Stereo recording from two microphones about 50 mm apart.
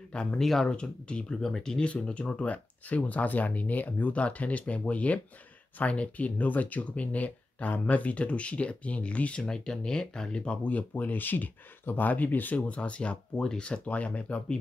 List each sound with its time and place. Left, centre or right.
0.1 s speech: left
0.4 s speech: centre
0.7 s speech: left
1.4 s speech: centre; by 12.5 s left
12.5 s speech: left